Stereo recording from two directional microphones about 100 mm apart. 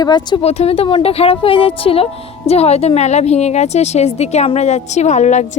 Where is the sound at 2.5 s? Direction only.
90° left.